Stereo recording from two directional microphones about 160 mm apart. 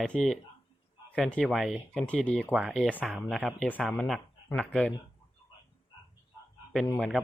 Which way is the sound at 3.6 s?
10° left (ahead or behind).